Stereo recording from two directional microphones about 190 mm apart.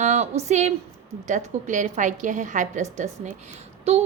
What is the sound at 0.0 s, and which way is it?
A woman's voice, 35° right (ahead or behind).